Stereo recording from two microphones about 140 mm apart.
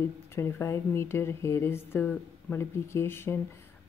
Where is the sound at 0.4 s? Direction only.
20° left (ahead or behind).